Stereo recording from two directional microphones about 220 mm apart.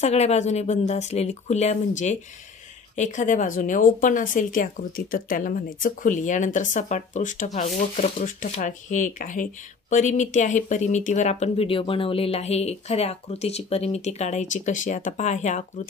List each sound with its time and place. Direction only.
0.0 s speech: 30° left (ahead or behind)